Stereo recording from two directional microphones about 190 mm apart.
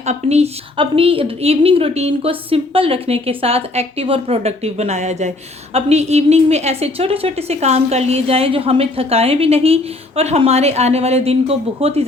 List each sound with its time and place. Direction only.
0.0 s a woman's voice: 35° right (ahead or behind)